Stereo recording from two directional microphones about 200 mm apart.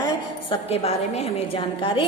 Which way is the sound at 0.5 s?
30° left (ahead or behind).